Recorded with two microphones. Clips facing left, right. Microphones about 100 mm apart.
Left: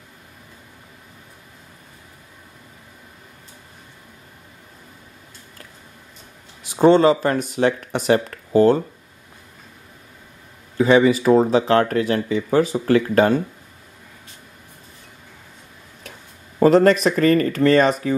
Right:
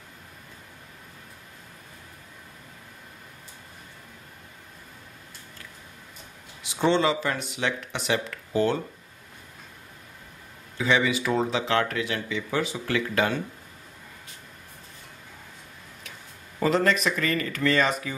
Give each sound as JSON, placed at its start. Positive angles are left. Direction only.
{"t": 6.6, "sound": "speech", "side_deg": 40}
{"t": 10.8, "sound": "speech", "side_deg": 40}
{"t": 16.5, "sound": "speech", "side_deg": 40}